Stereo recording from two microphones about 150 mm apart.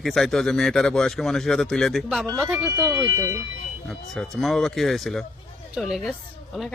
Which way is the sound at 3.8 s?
5° left (ahead or behind).